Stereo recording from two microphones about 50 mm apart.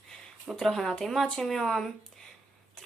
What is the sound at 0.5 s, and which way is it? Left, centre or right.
Speech, centre.